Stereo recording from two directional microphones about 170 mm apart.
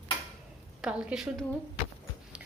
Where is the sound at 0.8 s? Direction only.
5° right (ahead or behind).